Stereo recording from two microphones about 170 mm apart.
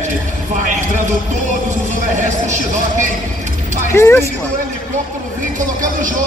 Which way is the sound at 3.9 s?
15° left (ahead or behind).